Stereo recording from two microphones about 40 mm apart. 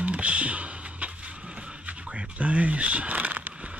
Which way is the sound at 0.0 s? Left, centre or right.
Right.